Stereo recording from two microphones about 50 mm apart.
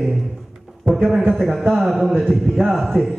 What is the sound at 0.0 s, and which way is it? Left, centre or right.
A man's voice, centre.